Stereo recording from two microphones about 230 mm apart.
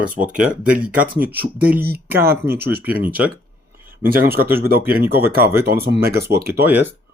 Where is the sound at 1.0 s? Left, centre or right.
Right.